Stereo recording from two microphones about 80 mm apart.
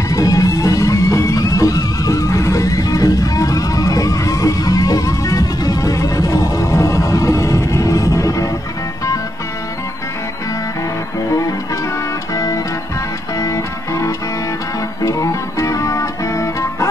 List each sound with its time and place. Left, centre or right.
0.1 s music: left
13.4 s music: left